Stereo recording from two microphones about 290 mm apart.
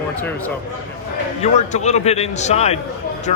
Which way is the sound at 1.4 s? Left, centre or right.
Left.